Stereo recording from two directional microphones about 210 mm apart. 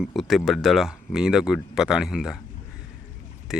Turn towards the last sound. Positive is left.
turn(degrees=-5)  # may be behind; listen again after turning